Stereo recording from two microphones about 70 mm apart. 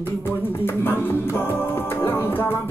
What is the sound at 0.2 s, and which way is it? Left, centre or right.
Music, left.